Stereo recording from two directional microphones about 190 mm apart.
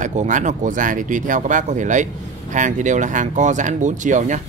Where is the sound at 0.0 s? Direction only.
40° right (ahead or behind).